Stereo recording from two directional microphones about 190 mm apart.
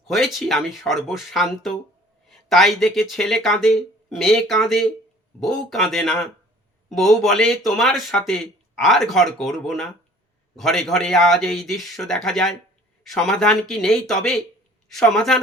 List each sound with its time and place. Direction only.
0.1 s speech: centre (ahead or behind)